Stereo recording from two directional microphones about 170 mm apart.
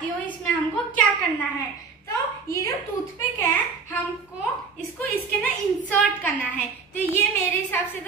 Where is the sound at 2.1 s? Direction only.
15° left (ahead or behind).